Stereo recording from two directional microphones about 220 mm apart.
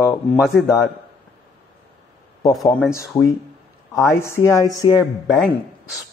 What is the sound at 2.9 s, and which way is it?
Speech, 15° left (ahead or behind).